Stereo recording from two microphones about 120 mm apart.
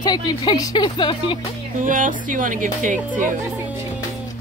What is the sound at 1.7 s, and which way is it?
Speech, 90° right.